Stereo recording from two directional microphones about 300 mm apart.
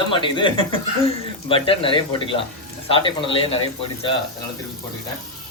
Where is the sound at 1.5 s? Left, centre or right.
Centre.